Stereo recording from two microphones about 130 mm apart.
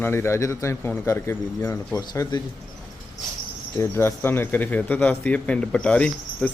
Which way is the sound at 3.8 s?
20° left (ahead or behind).